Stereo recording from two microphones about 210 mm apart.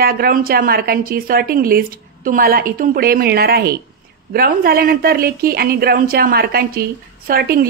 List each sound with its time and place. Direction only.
0.0 s a woman's voice: 45° right (ahead or behind)